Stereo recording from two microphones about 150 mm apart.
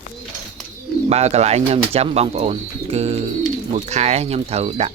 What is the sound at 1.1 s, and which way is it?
Speech, 45° right (ahead or behind).